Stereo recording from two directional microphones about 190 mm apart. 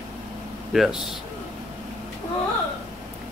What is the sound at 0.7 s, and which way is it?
Speech, centre (ahead or behind).